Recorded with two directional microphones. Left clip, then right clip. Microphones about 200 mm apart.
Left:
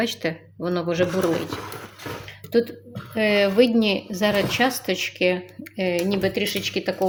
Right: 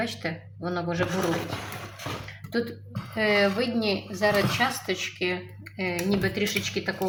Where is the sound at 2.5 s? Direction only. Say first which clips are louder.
Left 8 dB; 40° left (ahead or behind).